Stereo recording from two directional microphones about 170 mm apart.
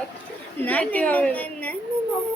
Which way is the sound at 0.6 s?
10° left (ahead or behind).